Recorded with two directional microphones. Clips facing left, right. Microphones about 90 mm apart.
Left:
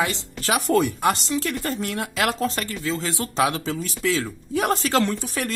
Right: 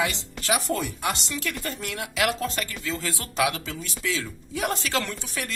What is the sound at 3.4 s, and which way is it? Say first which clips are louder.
Speech: left 3 dB; 35° left (ahead or behind).